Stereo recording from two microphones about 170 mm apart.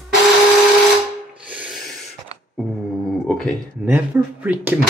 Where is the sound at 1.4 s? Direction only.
5° right (ahead or behind).